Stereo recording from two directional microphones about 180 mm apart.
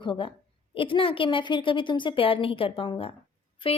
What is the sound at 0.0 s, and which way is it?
A woman's voice, 30° left (ahead or behind).